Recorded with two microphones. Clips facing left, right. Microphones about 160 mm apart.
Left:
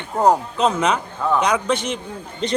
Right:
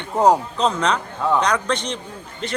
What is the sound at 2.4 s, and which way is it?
Speech, 20° left (ahead or behind).